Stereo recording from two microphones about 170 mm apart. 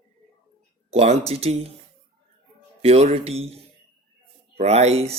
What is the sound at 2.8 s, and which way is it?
Speech, 35° right (ahead or behind).